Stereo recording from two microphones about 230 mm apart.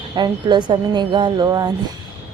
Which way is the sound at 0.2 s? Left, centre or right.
Centre.